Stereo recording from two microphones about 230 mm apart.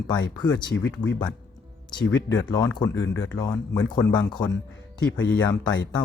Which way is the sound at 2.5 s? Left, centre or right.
Centre.